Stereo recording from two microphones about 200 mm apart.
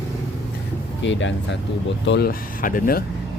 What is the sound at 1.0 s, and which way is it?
Speech, 65° left (ahead or behind).